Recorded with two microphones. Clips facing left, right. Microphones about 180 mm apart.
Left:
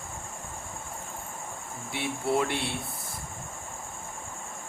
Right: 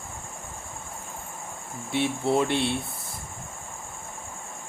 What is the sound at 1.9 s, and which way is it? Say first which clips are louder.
Speech: right 4 dB; 25° right (ahead or behind).